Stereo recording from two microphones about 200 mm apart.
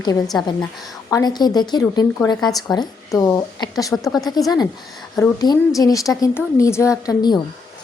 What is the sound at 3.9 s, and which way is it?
Speech, centre (ahead or behind).